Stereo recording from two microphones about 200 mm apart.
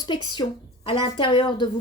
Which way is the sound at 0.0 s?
20° left (ahead or behind).